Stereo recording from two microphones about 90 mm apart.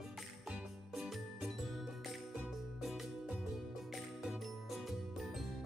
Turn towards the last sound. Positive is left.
turn(degrees=-5)  # may be behind; listen again after turning